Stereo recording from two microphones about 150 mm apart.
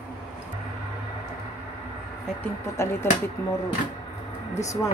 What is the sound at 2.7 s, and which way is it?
Speech, 20° left (ahead or behind).